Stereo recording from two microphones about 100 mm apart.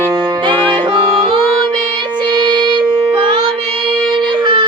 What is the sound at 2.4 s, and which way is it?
Music, 50° right (ahead or behind).